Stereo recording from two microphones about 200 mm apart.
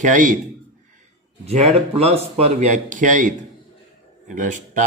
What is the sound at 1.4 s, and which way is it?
A man's voice, 35° right (ahead or behind).